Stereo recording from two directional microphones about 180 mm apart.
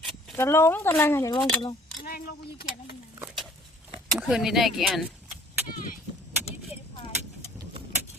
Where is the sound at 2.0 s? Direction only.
55° left (ahead or behind).